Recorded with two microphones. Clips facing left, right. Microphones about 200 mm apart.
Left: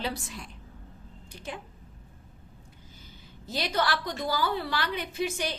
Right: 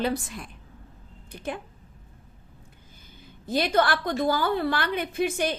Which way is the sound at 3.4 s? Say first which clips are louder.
Right 6 dB; 55° right (ahead or behind).